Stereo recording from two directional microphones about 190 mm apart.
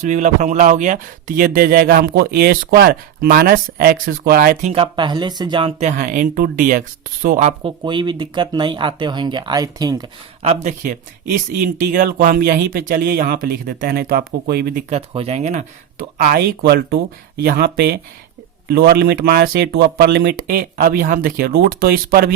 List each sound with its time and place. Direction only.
0.0 s speech: 40° right (ahead or behind)
1.4 s speech: 50° right (ahead or behind)
4.7 s speech: 25° right (ahead or behind)
7.9 s speech: 25° right (ahead or behind)
10.4 s speech: 35° right (ahead or behind)
14.9 s speech: 30° right (ahead or behind)
16.1 s speech: 50° right (ahead or behind)